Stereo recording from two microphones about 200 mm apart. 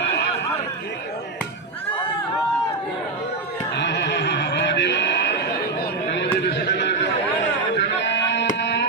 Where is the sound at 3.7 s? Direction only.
60° left (ahead or behind).